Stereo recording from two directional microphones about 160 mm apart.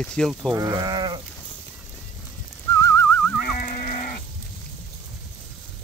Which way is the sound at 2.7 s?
20° left (ahead or behind).